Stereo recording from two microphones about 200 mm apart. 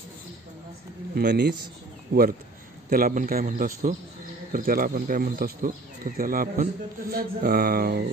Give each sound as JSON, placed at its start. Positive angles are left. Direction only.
{"t": 1.1, "sound": "speech", "side_deg": -50}